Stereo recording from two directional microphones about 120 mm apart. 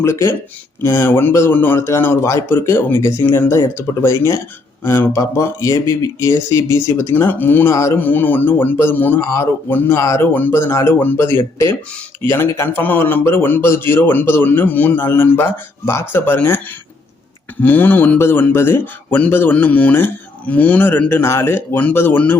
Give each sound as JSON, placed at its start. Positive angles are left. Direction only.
{"t": 0.0, "sound": "speech", "side_deg": 20}
{"t": 17.6, "sound": "speech", "side_deg": 15}